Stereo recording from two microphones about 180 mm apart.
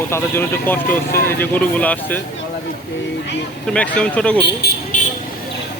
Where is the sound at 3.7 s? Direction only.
5° left (ahead or behind).